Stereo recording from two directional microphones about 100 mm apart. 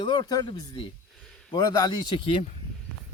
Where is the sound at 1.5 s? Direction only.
45° left (ahead or behind).